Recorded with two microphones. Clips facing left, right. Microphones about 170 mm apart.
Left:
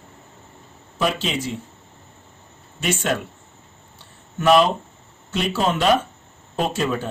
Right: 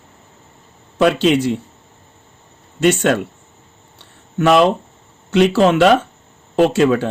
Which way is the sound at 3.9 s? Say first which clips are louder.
Right 9 dB; 70° right (ahead or behind).